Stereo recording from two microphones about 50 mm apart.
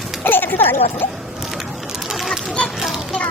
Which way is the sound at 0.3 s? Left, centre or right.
Left.